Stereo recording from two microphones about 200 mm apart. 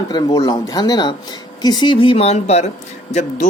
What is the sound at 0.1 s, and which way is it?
Speech, 20° left (ahead or behind).